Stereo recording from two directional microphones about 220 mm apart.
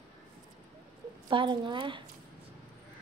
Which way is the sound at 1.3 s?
20° right (ahead or behind).